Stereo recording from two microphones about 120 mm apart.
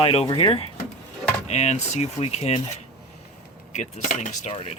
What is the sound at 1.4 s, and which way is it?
Speech, 70° left (ahead or behind).